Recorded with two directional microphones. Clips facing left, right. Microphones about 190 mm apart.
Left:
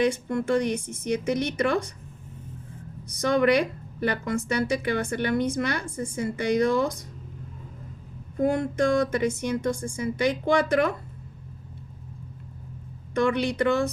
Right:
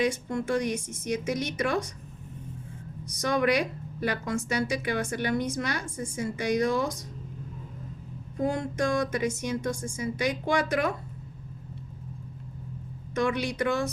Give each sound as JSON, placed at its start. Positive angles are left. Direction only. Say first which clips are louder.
{"t": 0.0, "sound": "a woman's voice", "louder": "left 3 dB", "side_deg": 60}
{"t": 3.1, "sound": "a woman's voice", "louder": "left 4 dB", "side_deg": 55}
{"t": 8.4, "sound": "a woman's voice", "louder": "left 4 dB", "side_deg": 55}
{"t": 13.1, "sound": "a woman's voice", "louder": "left 4 dB", "side_deg": 55}